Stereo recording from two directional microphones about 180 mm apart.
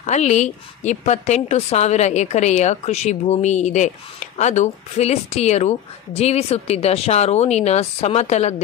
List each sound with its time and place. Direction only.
0.0 s a woman's voice: 40° left (ahead or behind)